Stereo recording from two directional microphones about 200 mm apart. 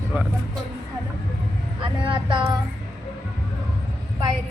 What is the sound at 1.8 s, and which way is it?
Vehicle, 25° right (ahead or behind).